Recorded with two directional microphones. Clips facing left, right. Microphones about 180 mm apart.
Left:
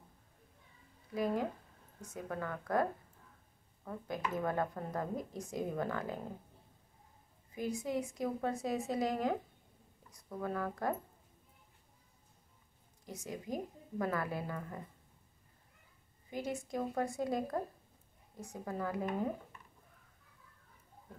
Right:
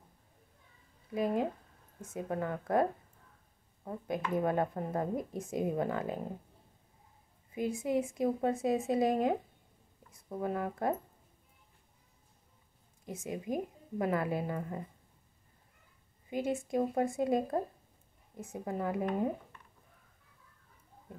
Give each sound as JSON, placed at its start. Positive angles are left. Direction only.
{"t": 1.1, "sound": "speech", "side_deg": -20}
{"t": 7.5, "sound": "speech", "side_deg": -25}
{"t": 13.0, "sound": "speech", "side_deg": -25}
{"t": 16.3, "sound": "speech", "side_deg": -25}